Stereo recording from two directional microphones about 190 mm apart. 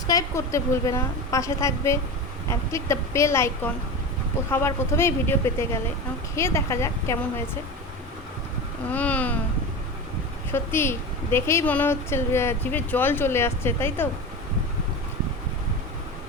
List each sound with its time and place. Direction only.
0.1 s a woman's voice: 15° left (ahead or behind)
8.9 s a woman's voice: 10° left (ahead or behind)
10.5 s a woman's voice: 15° left (ahead or behind)